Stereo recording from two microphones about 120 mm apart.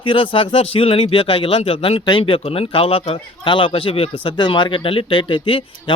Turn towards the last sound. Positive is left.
turn(degrees=45)  # may be behind; listen again after turning